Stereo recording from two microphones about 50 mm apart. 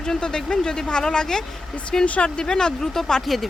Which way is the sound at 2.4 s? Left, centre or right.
Centre.